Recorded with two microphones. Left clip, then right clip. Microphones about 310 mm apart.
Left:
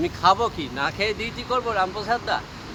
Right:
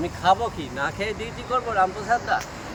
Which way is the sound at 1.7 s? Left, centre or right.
Left.